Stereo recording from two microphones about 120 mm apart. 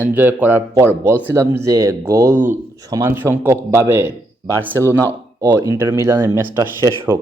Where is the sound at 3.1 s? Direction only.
15° right (ahead or behind).